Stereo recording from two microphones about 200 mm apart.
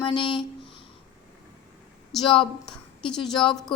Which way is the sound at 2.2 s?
25° left (ahead or behind).